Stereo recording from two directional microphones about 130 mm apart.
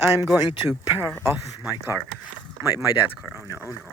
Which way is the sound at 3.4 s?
20° right (ahead or behind).